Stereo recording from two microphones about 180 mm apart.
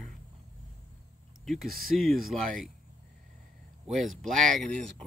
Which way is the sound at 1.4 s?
Centre (ahead or behind).